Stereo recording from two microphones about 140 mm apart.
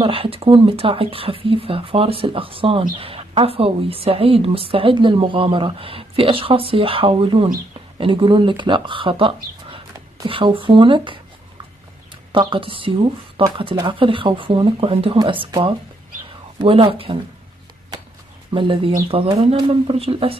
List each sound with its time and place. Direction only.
0.0 s a woman's voice: 40° right (ahead or behind)
9.9 s a sound: 30° right (ahead or behind)
10.3 s a woman's voice: 40° right (ahead or behind)
12.3 s a woman's voice: 40° right (ahead or behind)
18.5 s a woman's voice: 40° right (ahead or behind)